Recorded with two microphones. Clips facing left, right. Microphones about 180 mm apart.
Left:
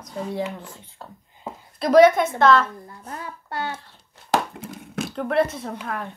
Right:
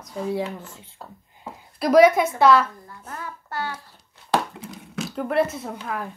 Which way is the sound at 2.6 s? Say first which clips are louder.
Left 1 dB; 30° left (ahead or behind).